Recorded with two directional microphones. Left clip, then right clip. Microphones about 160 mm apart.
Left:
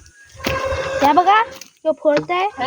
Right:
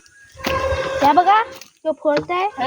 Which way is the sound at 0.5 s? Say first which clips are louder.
Right 1 dB; 65° right (ahead or behind).